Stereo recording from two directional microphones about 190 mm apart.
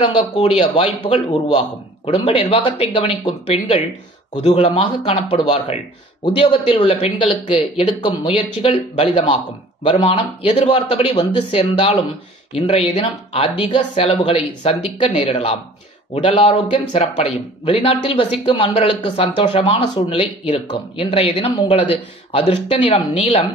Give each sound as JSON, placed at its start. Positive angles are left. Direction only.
{"t": 0.0, "sound": "speech", "side_deg": 30}